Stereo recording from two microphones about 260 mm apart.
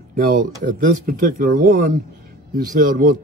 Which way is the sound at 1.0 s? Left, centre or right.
Right.